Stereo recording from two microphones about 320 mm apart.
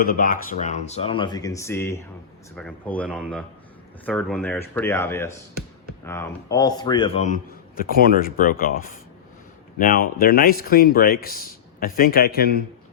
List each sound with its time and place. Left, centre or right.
0.0 s speech: left
7.2 s speech: left